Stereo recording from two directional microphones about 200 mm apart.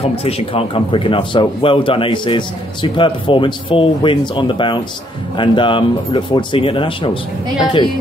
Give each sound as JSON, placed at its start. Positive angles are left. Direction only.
{"t": 0.0, "sound": "a man's voice", "side_deg": 30}